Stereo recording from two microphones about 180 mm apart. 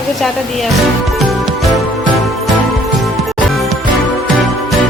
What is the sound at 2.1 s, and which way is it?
Music, centre (ahead or behind).